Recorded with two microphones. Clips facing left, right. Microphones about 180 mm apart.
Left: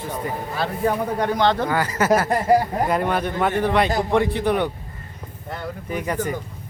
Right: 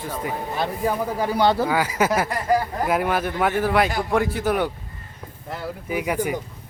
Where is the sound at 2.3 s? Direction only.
35° left (ahead or behind).